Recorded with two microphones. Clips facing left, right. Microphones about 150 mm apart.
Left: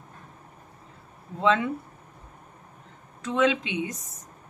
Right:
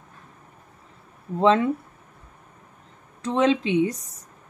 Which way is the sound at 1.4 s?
35° right (ahead or behind).